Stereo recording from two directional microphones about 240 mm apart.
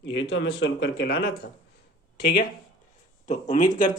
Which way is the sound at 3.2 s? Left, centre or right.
Left.